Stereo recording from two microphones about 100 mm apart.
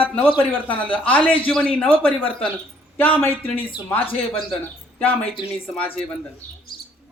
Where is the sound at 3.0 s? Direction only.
20° left (ahead or behind).